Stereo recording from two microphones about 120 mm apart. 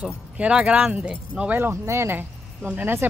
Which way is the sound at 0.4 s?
10° right (ahead or behind).